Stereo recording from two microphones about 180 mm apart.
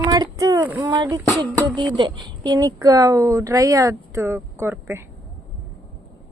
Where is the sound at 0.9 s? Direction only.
20° right (ahead or behind).